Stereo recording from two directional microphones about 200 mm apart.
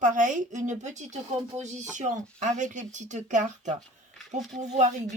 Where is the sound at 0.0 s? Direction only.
40° right (ahead or behind).